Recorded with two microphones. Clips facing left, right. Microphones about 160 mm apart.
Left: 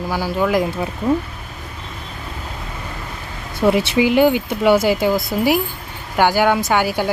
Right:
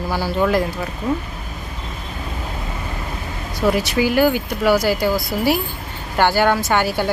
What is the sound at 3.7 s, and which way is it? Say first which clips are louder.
A woman's voice: left 3 dB; 25° left (ahead or behind).